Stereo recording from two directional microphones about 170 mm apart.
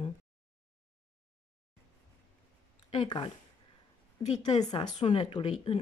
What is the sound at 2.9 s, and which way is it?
Speech, 30° left (ahead or behind).